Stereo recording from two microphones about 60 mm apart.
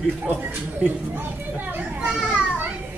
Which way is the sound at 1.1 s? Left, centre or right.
Right.